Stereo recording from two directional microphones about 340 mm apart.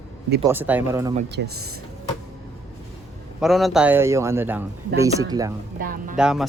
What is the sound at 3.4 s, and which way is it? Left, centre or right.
A man's voice, centre.